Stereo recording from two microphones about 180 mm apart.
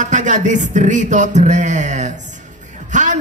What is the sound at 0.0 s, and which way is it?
Music, 40° right (ahead or behind).